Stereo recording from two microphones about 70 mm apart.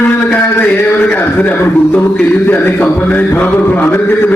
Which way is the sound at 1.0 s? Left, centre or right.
Left.